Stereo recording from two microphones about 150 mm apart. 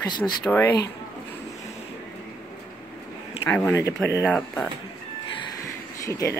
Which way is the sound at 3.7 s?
20° left (ahead or behind).